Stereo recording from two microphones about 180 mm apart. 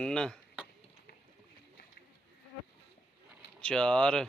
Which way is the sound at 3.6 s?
5° left (ahead or behind).